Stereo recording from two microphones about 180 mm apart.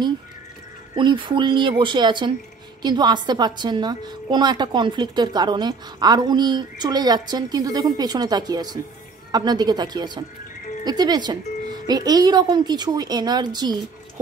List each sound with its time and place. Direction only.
0.9 s a woman's voice: 25° right (ahead or behind)